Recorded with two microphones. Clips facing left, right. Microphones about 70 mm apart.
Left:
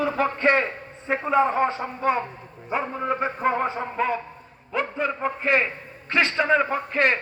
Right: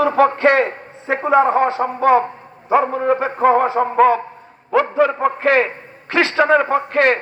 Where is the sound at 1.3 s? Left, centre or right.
Right.